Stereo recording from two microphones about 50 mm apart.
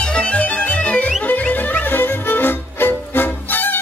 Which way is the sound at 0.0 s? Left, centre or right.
Left.